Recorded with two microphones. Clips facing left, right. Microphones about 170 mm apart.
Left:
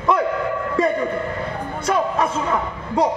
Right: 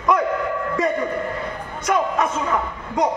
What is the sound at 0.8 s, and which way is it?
A man's voice, 30° left (ahead or behind).